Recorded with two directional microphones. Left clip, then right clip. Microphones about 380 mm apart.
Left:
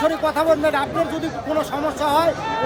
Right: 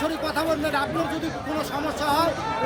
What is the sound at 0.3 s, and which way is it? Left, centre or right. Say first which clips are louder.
Speech: left 4 dB; left.